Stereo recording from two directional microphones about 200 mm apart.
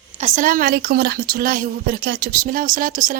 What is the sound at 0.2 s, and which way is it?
A woman's voice, 40° right (ahead or behind).